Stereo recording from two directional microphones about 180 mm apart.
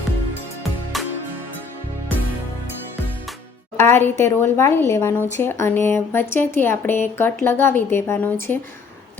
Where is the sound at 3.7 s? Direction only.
15° left (ahead or behind).